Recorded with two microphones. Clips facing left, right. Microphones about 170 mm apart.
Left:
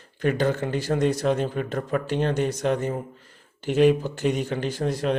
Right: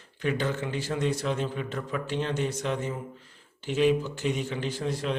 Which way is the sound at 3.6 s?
55° left (ahead or behind).